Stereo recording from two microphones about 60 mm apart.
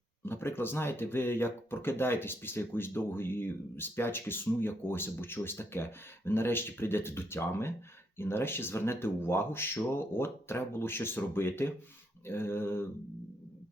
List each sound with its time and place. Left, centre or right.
0.3 s speech: left